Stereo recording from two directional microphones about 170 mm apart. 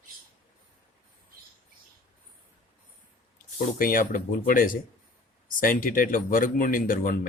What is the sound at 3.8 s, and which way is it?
Speech, 55° left (ahead or behind).